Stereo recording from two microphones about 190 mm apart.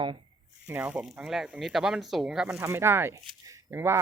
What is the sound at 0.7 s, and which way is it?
Speech, 10° right (ahead or behind).